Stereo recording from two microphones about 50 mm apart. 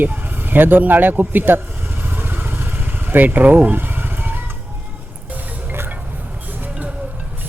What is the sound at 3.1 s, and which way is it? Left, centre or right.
Speech, right.